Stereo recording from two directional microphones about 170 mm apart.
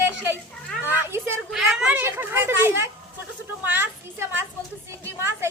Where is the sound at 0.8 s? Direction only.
10° right (ahead or behind).